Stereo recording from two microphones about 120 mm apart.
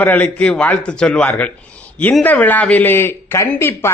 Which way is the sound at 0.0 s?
15° left (ahead or behind).